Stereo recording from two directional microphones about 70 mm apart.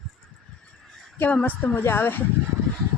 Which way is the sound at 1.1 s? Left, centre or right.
Left.